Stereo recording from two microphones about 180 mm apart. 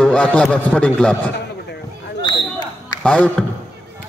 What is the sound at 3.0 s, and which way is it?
Speech, 5° left (ahead or behind).